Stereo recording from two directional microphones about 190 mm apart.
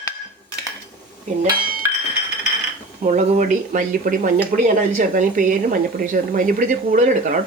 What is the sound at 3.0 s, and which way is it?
Speech, 40° right (ahead or behind).